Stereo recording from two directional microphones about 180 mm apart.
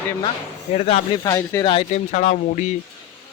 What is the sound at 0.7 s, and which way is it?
Speech, 35° left (ahead or behind).